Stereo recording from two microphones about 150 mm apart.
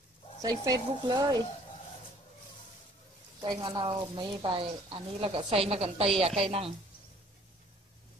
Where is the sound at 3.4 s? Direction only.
30° right (ahead or behind).